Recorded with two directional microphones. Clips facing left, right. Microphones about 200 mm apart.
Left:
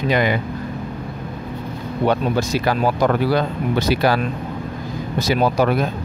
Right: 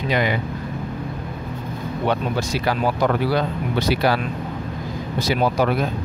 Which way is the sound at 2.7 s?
45° left (ahead or behind).